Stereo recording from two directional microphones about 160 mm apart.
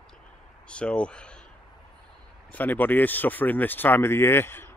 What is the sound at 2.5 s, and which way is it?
Speech, 10° left (ahead or behind).